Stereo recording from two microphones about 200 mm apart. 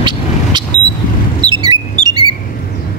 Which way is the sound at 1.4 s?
20° right (ahead or behind).